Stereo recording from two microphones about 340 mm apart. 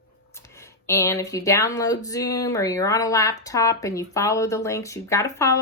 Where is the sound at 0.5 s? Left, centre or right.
Centre.